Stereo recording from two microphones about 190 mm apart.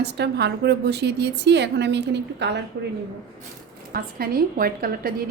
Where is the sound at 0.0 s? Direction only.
60° right (ahead or behind).